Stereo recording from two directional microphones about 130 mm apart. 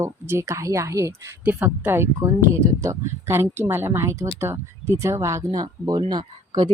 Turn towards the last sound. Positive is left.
turn(degrees=-30)  # may be behind; listen again after turning